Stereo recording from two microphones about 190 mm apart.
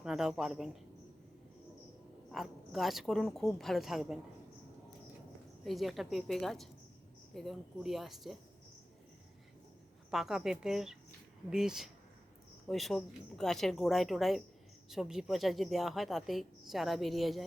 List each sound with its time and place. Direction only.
0.0 s a woman's voice: 5° right (ahead or behind)
2.3 s a woman's voice: centre (ahead or behind)
5.6 s a woman's voice: centre (ahead or behind)
10.1 s a woman's voice: centre (ahead or behind)